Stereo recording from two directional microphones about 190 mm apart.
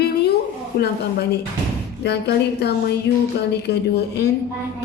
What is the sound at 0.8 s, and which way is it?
A woman's voice, 55° left (ahead or behind).